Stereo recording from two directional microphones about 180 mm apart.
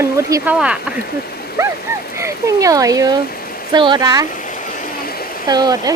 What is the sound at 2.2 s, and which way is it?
Speech, 15° right (ahead or behind).